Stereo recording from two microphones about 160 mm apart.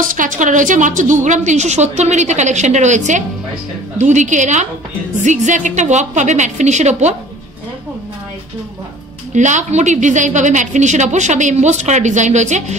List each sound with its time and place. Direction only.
0.0 s a woman's voice: 55° right (ahead or behind)
9.3 s a woman's voice: 50° right (ahead or behind)